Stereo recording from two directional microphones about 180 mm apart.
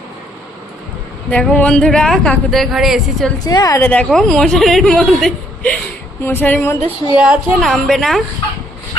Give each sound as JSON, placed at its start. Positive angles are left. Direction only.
{"t": 1.3, "sound": "speech", "side_deg": 5}
{"t": 3.3, "sound": "a woman's voice", "side_deg": 20}
{"t": 3.8, "sound": "a woman's voice", "side_deg": 5}
{"t": 7.2, "sound": "speech", "side_deg": 0}